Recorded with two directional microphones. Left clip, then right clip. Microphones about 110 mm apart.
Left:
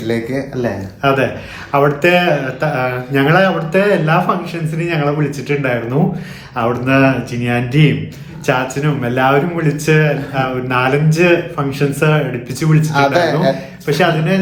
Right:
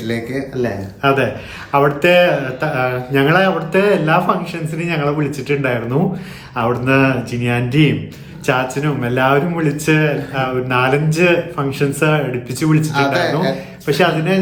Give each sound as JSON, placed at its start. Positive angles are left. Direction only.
{"t": 0.0, "sound": "speech", "side_deg": 0}
{"t": 1.7, "sound": "speech", "side_deg": -30}
{"t": 13.1, "sound": "speech", "side_deg": -5}
{"t": 13.8, "sound": "speech", "side_deg": -40}